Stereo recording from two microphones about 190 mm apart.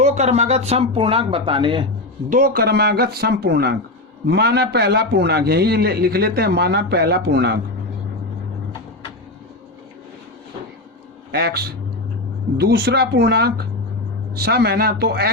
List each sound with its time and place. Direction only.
0.0 s speech: 35° right (ahead or behind)
2.3 s a man's voice: 50° right (ahead or behind)
11.3 s a man's voice: 55° right (ahead or behind)